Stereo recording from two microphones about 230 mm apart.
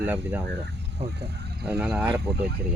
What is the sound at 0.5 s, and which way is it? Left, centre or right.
Speech, right.